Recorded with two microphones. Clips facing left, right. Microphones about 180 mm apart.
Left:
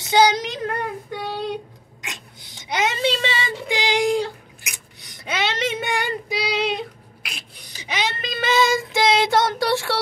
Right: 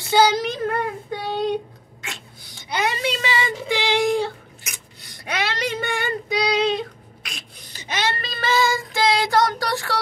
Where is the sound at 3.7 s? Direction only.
15° left (ahead or behind).